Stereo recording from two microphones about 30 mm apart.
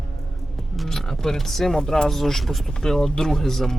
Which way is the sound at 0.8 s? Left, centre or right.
Centre.